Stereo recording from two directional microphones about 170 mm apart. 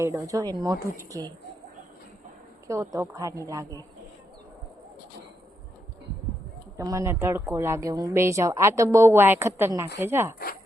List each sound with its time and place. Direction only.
0.0 s speech: 15° right (ahead or behind)
2.6 s speech: 20° right (ahead or behind)
6.7 s a woman's voice: 20° right (ahead or behind)